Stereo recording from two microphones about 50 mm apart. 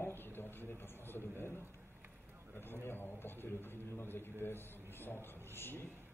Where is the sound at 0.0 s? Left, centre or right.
Left.